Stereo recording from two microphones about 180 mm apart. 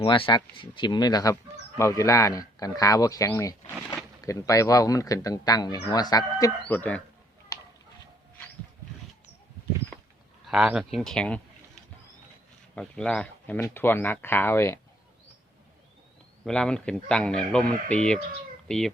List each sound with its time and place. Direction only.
0.0 s a man's voice: 30° left (ahead or behind); by 7.0 s 10° left (ahead or behind)
10.4 s speech: 5° right (ahead or behind)
12.7 s speech: 5° left (ahead or behind)
16.4 s speech: 5° left (ahead or behind)